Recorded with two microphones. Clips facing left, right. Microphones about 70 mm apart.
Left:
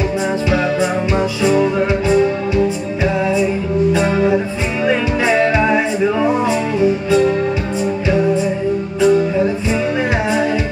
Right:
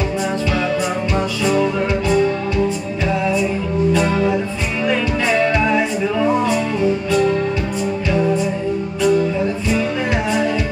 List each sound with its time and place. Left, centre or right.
1.1 s music: centre
3.9 s music: centre
6.2 s music: centre
9.0 s music: left